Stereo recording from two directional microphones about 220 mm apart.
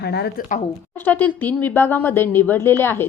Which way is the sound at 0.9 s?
10° left (ahead or behind).